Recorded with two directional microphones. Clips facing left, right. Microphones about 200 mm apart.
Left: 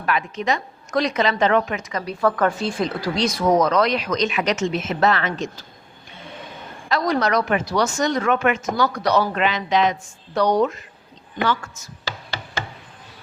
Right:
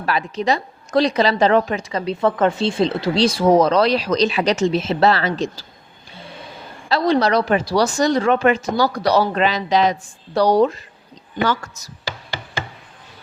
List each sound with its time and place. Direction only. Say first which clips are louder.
0.0 s a woman's voice: right 2 dB; 35° right (ahead or behind)
6.8 s a woman's voice: right 4 dB; 30° right (ahead or behind)